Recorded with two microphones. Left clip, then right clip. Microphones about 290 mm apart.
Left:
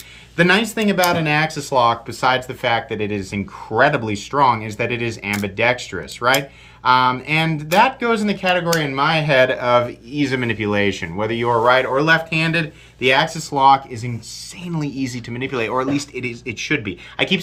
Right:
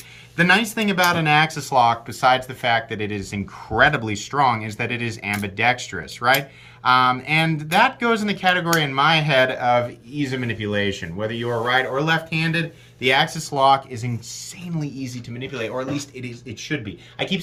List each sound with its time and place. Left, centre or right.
0.3 s speech: centre